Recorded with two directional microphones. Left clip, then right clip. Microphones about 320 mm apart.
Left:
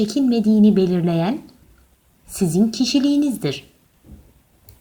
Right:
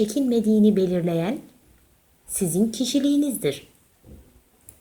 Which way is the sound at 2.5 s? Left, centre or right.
Left.